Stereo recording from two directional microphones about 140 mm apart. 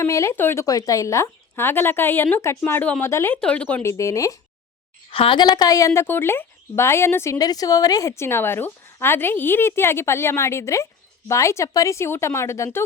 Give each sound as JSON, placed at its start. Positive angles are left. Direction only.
{"t": 0.0, "sound": "speech", "side_deg": 20}
{"t": 3.8, "sound": "a woman's voice", "side_deg": 20}
{"t": 5.1, "sound": "a woman's voice", "side_deg": 40}